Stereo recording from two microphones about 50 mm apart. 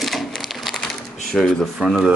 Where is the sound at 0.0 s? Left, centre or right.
Centre.